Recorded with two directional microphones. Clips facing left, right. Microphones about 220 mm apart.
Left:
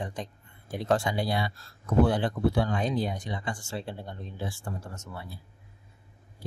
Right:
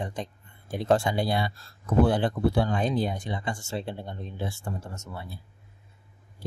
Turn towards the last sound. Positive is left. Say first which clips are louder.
# right 2 dB
turn(degrees=-25)  # may be behind; listen again after turning